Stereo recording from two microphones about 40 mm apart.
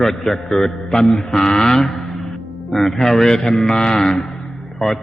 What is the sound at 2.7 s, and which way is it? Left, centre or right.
A man's voice, centre.